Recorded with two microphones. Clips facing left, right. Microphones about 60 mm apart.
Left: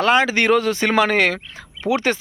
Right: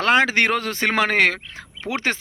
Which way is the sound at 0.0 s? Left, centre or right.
Right.